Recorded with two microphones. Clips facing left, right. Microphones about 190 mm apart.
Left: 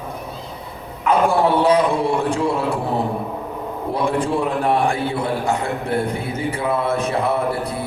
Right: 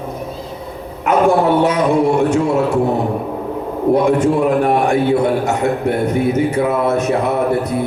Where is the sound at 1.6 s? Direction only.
30° left (ahead or behind).